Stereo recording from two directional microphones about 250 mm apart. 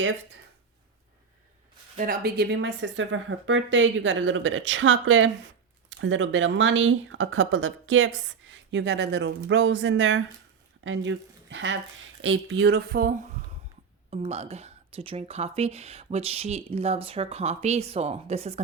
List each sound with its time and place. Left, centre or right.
2.0 s speech: right
14.1 s a woman's voice: right